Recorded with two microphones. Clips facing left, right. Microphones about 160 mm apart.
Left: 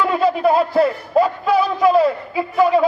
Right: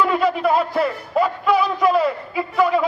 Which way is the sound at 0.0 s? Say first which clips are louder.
Left 2 dB; 30° left (ahead or behind).